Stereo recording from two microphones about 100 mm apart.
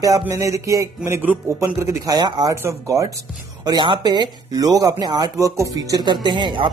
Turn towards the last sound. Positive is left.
turn(degrees=-55)  # may be behind; listen again after turning